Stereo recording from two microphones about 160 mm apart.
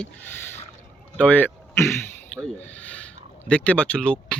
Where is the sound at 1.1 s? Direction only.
10° left (ahead or behind).